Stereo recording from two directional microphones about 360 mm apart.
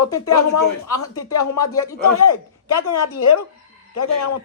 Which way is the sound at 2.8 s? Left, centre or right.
Left.